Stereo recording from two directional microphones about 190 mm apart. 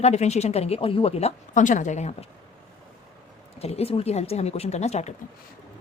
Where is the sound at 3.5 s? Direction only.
35° left (ahead or behind).